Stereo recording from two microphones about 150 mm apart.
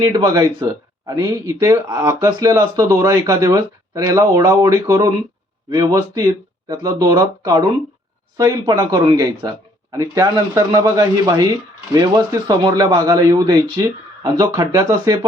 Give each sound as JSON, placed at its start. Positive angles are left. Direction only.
{"t": 0.0, "sound": "speech", "side_deg": -25}